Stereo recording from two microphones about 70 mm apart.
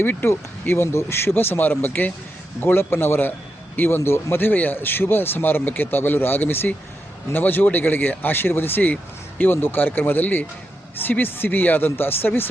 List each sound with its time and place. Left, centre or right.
0.0 s speech: left